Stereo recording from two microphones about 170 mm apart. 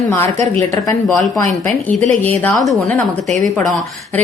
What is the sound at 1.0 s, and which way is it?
A woman's voice, centre (ahead or behind).